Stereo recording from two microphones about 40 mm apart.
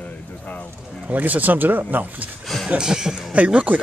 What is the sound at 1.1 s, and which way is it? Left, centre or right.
Speech, right.